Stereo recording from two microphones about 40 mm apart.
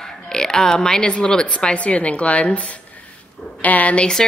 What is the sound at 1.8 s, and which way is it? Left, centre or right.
Speech, left.